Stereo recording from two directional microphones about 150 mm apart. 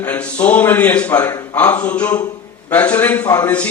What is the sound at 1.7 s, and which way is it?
Speech, 10° left (ahead or behind).